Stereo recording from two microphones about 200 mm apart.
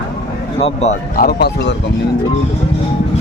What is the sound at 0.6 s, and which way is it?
Speech, 30° left (ahead or behind).